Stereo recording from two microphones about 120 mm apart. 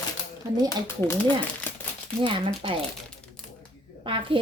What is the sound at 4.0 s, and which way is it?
Speech, 45° right (ahead or behind).